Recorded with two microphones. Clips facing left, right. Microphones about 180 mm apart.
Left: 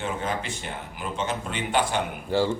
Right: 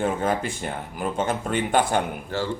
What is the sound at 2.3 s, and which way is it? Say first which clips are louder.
Speech: left 5 dB; 15° left (ahead or behind).